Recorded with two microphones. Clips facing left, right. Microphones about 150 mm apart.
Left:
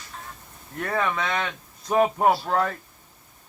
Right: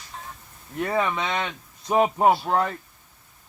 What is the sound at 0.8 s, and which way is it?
Speech, 10° right (ahead or behind).